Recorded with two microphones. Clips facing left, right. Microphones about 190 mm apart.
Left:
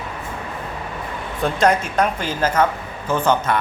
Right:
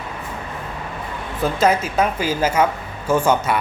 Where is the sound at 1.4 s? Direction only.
5° right (ahead or behind).